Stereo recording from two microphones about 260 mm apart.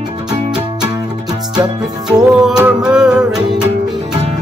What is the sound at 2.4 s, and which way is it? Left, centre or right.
Music, centre.